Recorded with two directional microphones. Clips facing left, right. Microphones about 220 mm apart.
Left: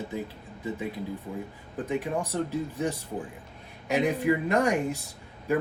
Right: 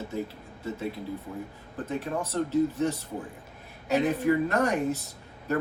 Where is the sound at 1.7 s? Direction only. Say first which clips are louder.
Left 2 dB; 15° left (ahead or behind).